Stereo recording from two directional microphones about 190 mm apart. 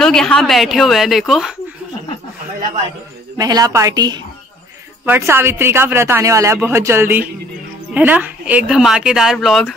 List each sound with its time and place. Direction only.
0.0 s speech: 5° left (ahead or behind)
3.3 s a woman's voice: 20° right (ahead or behind); by 9.8 s centre (ahead or behind)